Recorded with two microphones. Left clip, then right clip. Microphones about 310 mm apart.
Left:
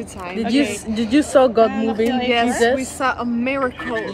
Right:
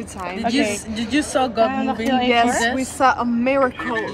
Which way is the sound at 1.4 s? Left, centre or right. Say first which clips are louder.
Left 6 dB; left.